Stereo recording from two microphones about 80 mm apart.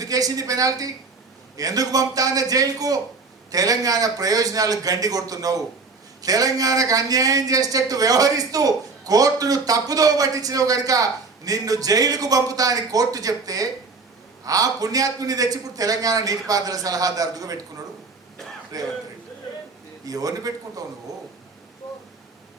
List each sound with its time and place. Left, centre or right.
0.0 s speech: right
18.7 s speech: right
20.1 s speech: right